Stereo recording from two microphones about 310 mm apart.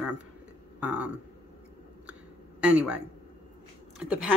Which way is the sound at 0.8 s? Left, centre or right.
Centre.